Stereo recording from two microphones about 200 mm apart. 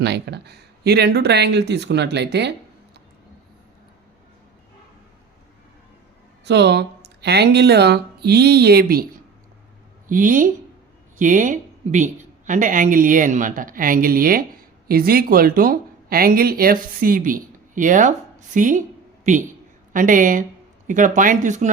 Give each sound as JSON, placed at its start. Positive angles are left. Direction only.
{"t": 0.0, "sound": "speech", "side_deg": -55}
{"t": 6.4, "sound": "speech", "side_deg": -60}
{"t": 10.1, "sound": "a woman's voice", "side_deg": -40}